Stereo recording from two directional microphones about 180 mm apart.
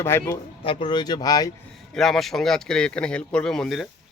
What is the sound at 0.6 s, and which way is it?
Speech, 30° left (ahead or behind).